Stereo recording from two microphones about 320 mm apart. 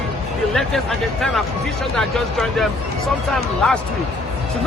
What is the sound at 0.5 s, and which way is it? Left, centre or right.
Speech, centre.